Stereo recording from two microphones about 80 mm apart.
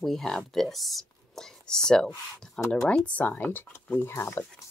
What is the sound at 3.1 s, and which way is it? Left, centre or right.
Speech, left.